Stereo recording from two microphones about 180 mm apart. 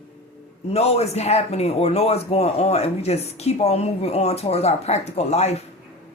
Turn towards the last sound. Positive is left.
turn(degrees=35)  # may be behind; listen again after turning